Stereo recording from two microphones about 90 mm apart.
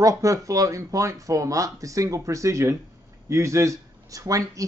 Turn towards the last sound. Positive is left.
turn(degrees=-40)  # may be behind; listen again after turning